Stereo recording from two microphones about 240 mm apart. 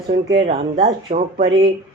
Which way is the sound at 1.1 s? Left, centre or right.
Right.